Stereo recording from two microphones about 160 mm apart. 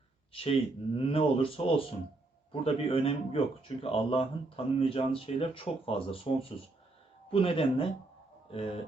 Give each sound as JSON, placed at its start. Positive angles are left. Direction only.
{"t": 0.3, "sound": "speech", "side_deg": 35}
{"t": 7.3, "sound": "speech", "side_deg": 35}